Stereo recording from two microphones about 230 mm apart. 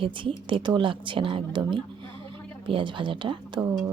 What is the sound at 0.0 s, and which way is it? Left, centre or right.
Speech, right.